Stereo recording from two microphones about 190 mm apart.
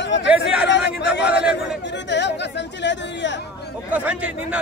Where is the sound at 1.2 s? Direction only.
5° right (ahead or behind).